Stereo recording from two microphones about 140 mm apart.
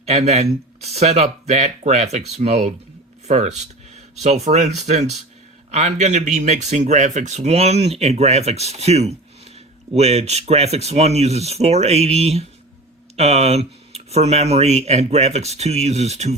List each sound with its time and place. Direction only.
0.0 s speech: 50° right (ahead or behind)